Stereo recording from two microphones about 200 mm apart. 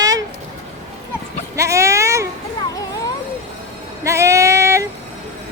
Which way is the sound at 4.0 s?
15° right (ahead or behind).